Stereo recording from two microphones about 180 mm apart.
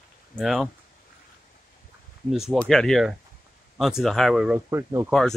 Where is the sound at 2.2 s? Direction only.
Centre (ahead or behind).